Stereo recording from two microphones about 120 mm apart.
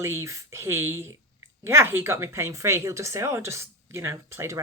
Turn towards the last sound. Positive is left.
turn(degrees=-20)  # may be behind; listen again after turning